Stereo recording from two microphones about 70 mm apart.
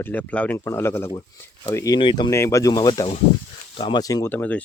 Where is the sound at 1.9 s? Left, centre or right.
Left.